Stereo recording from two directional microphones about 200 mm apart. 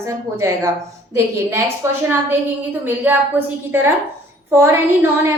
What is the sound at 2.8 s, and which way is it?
A woman's voice, 10° right (ahead or behind).